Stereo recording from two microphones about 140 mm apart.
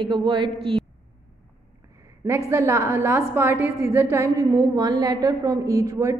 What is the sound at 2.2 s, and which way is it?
A woman's voice, 20° right (ahead or behind).